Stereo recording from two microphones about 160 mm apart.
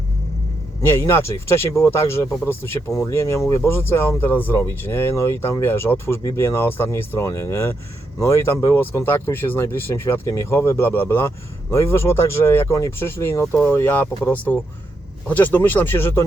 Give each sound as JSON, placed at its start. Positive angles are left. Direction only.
{"t": 0.8, "sound": "speech", "side_deg": 15}